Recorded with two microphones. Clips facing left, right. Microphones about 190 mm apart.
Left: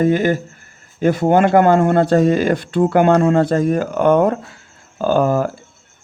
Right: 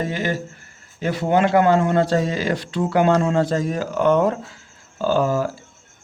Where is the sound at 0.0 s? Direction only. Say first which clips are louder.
Left 9 dB; 50° left (ahead or behind).